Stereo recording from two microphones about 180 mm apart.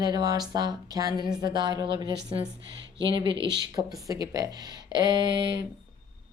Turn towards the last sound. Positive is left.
turn(degrees=-25)  # may be behind; listen again after turning